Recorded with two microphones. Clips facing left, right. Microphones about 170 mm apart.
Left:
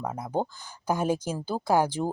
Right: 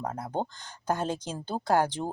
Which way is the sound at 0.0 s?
10° left (ahead or behind).